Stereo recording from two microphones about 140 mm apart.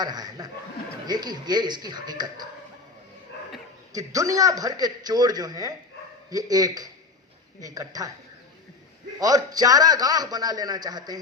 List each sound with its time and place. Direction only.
0.0 s speech: 30° right (ahead or behind)
3.9 s a man's voice: 25° right (ahead or behind)
9.1 s a man's voice: 25° right (ahead or behind)